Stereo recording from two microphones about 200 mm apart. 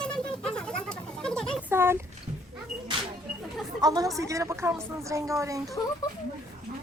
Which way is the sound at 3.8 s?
20° right (ahead or behind).